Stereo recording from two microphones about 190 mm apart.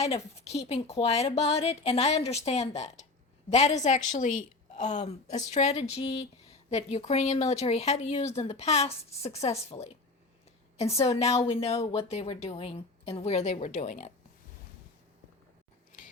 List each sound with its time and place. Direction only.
0.0 s speech: 35° left (ahead or behind)